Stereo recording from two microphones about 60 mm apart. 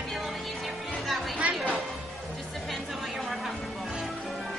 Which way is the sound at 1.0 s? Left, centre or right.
Centre.